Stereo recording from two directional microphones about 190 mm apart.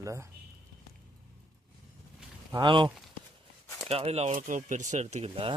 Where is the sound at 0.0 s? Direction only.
15° right (ahead or behind).